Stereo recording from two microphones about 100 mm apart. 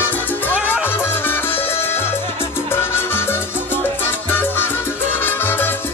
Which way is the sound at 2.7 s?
25° left (ahead or behind).